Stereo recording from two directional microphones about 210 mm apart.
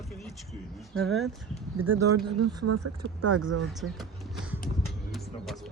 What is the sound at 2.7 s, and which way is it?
Speech, 90° right.